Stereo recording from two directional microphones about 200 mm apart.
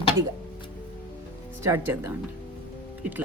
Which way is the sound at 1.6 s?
10° right (ahead or behind).